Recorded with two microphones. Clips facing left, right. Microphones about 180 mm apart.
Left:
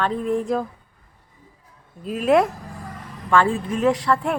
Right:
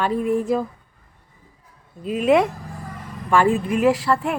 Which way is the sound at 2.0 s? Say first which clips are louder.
Right 1 dB; centre (ahead or behind).